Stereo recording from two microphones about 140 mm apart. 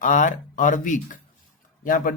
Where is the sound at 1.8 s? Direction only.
80° left.